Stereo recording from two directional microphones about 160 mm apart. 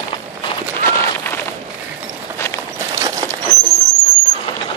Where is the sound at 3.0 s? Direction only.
20° right (ahead or behind).